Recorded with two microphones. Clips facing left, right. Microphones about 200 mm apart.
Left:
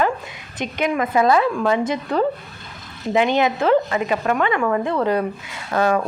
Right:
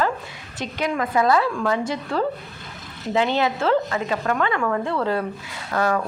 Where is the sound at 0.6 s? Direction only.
20° left (ahead or behind).